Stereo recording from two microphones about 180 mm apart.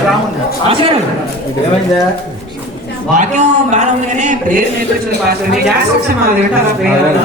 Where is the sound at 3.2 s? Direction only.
40° right (ahead or behind).